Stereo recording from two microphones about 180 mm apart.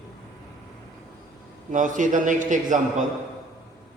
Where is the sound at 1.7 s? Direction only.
45° right (ahead or behind).